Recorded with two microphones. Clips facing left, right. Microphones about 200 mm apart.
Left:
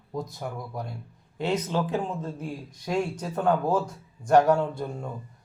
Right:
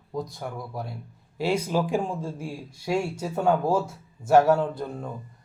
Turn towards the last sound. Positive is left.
turn(degrees=0)  # may be behind; listen again after turning